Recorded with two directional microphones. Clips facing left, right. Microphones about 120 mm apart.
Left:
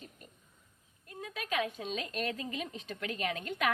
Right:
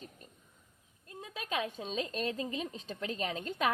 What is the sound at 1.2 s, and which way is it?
A woman's voice, 30° right (ahead or behind).